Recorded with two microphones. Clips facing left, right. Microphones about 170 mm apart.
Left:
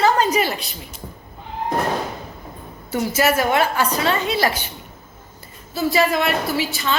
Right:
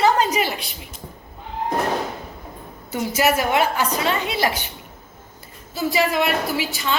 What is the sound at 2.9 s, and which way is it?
A woman's voice, 15° right (ahead or behind).